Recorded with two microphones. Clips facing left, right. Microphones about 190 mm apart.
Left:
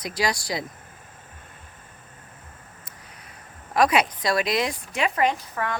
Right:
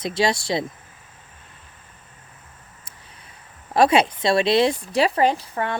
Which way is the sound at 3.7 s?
30° right (ahead or behind).